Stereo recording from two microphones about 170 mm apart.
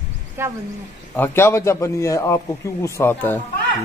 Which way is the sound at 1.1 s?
15° left (ahead or behind).